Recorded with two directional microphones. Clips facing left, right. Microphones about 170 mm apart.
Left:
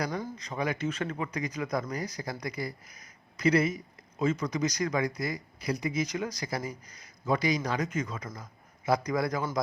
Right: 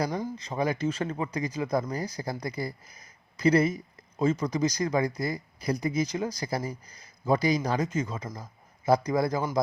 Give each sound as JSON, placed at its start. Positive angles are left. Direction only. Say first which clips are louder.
{"t": 0.0, "sound": "speech", "louder": "right 3 dB", "side_deg": -25}